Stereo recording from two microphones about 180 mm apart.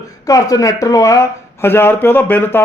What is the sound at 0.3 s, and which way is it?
A woman's voice, 20° left (ahead or behind).